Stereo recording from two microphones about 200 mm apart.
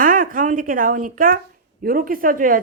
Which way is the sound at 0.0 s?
45° right (ahead or behind).